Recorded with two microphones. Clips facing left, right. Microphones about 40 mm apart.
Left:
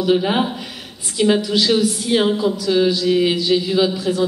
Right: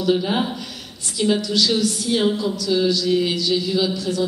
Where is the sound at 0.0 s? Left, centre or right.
Left.